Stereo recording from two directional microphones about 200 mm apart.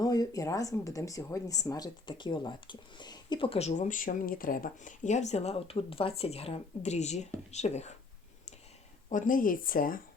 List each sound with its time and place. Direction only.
0.0 s speech: 20° left (ahead or behind)
9.0 s speech: 40° left (ahead or behind)